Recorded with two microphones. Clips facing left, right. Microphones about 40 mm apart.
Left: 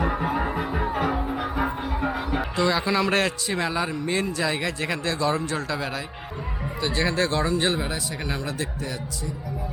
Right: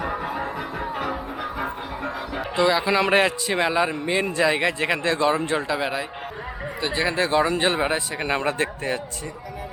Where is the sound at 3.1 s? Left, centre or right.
Centre.